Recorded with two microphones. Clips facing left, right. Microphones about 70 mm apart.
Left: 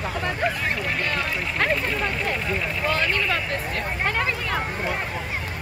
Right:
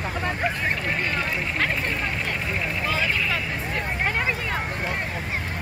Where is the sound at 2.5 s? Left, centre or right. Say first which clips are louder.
Left 2 dB; centre.